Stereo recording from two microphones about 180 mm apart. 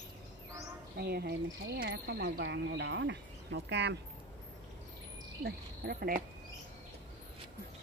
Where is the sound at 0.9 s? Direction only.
60° right (ahead or behind).